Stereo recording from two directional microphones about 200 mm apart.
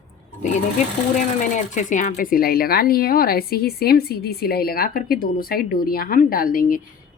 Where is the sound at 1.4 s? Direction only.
40° left (ahead or behind).